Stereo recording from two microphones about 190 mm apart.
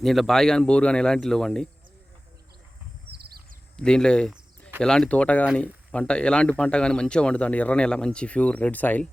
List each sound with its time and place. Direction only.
0.0 s a man's voice: centre (ahead or behind)
3.1 s bird: 55° right (ahead or behind)
3.8 s a sound: 5° left (ahead or behind)
4.8 s a man's voice: 5° left (ahead or behind)